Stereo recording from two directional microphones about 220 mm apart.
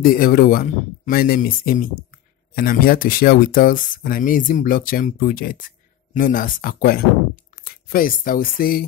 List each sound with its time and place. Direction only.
0.0 s speech: 40° left (ahead or behind)